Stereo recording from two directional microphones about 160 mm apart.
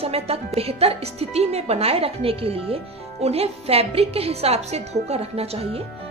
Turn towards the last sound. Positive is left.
turn(degrees=-40)  # may be behind; listen again after turning